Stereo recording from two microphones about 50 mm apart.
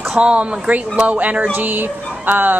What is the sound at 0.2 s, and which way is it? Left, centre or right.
Speech, right.